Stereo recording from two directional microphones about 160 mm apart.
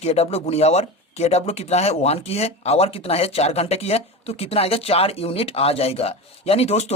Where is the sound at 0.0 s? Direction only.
40° left (ahead or behind).